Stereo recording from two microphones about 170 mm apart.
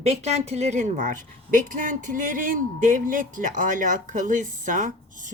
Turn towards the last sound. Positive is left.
turn(degrees=-50)  # may be behind; listen again after turning